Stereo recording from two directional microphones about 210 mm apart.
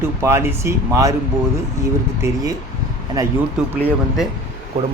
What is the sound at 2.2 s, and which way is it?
Speech, 10° right (ahead or behind).